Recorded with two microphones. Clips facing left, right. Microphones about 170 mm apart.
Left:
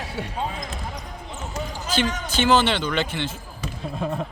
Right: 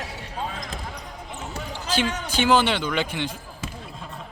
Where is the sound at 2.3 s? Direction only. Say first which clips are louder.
Even; 10° right (ahead or behind).